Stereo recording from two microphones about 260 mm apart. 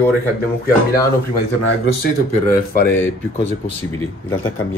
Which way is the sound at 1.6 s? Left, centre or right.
Left.